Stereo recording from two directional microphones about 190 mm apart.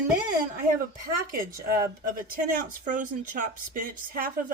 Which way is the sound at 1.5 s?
50° right (ahead or behind).